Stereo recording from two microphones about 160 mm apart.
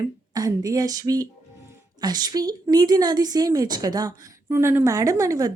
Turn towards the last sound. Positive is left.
turn(degrees=-20)  # may be behind; listen again after turning